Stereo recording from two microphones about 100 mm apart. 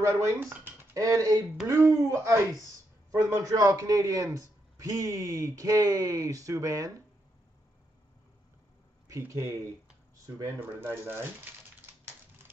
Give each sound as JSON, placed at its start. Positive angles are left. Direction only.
{"t": 0.0, "sound": "speech", "side_deg": -30}
{"t": 10.2, "sound": "speech", "side_deg": -25}